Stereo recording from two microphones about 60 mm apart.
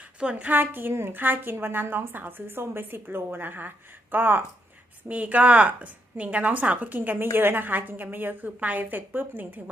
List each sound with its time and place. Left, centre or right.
0.0 s a woman's voice: centre
0.6 s a woman's voice: right